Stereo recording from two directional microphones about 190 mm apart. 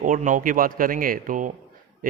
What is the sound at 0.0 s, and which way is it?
A man's voice, 45° right (ahead or behind).